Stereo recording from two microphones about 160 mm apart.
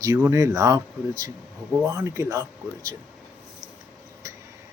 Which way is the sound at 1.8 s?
20° right (ahead or behind).